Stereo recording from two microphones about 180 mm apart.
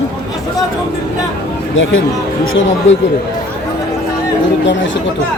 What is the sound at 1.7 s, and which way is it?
Speech, 90° left.